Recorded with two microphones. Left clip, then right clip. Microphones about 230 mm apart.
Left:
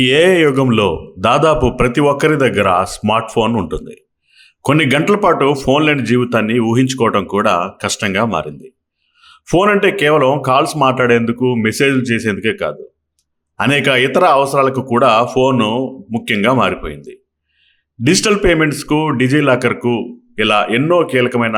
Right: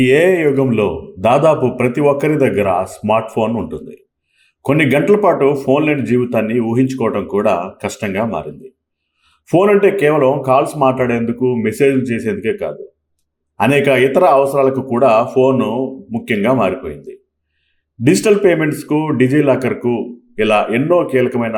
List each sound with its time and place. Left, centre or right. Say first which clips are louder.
0.0 s a man's voice: left 1 dB; left